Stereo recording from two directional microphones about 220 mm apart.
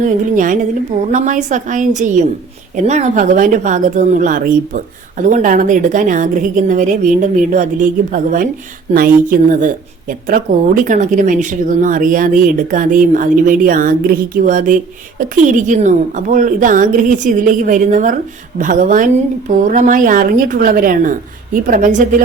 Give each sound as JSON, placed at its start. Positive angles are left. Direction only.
{"t": 0.0, "sound": "speech", "side_deg": -35}